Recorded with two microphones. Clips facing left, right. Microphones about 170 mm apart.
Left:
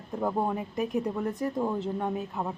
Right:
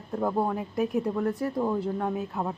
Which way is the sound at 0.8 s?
5° right (ahead or behind).